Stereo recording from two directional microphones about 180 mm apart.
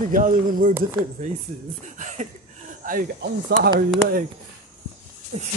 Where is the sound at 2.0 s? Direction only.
40° right (ahead or behind).